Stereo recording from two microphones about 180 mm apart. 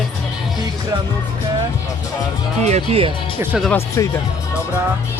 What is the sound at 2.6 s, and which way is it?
Speech, 40° right (ahead or behind).